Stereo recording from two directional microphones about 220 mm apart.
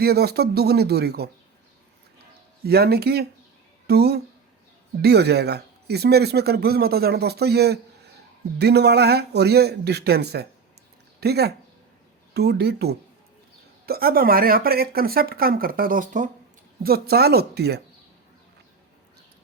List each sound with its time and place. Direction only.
0.0 s speech: 45° right (ahead or behind)
2.6 s speech: 45° right (ahead or behind)